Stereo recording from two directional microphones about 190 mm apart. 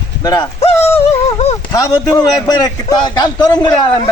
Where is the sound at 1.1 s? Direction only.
35° left (ahead or behind).